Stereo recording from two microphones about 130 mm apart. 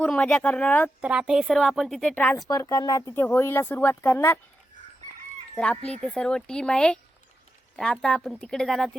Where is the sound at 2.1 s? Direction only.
15° left (ahead or behind).